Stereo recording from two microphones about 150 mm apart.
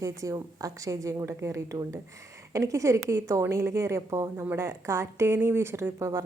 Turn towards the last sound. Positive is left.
turn(degrees=-20)  # may be behind; listen again after turning